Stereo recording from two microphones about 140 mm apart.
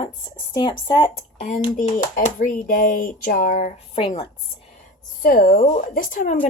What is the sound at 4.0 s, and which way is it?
Speech, 45° left (ahead or behind).